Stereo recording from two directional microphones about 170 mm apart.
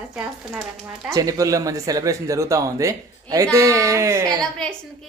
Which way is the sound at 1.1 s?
20° right (ahead or behind).